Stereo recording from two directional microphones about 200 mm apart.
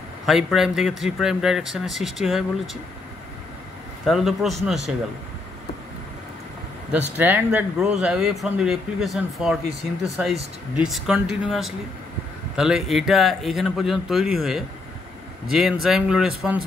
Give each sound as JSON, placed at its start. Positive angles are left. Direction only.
{"t": 0.3, "sound": "speech", "side_deg": 0}
{"t": 4.0, "sound": "speech", "side_deg": 0}
{"t": 6.9, "sound": "speech", "side_deg": -10}
{"t": 10.8, "sound": "speech", "side_deg": -5}